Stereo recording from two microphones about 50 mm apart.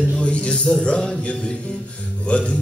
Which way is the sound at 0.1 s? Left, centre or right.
Left.